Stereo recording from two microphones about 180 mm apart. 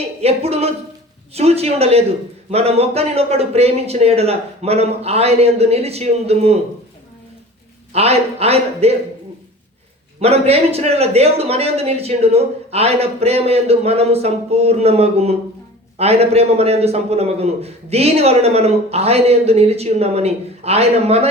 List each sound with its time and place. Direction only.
0.2 s a man's voice: 35° right (ahead or behind)
7.9 s a man's voice: 35° right (ahead or behind)
10.2 s a man's voice: 35° right (ahead or behind)